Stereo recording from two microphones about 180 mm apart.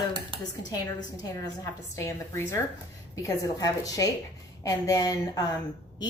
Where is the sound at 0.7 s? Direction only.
20° left (ahead or behind).